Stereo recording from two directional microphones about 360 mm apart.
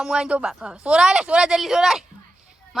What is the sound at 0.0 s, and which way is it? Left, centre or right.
Speech, centre.